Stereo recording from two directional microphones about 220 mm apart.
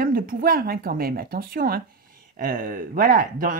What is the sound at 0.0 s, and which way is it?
Speech, 40° right (ahead or behind).